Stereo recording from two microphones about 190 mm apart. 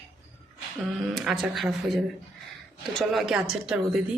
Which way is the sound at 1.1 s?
Centre (ahead or behind).